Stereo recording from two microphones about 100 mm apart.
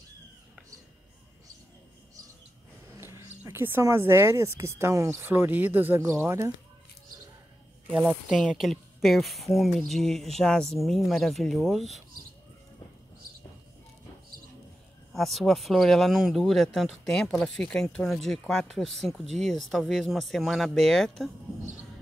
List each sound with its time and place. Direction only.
3.0 s a sound: 30° right (ahead or behind)
3.8 s speech: 25° right (ahead or behind)
7.9 s speech: 10° right (ahead or behind)
15.1 s speech: centre (ahead or behind)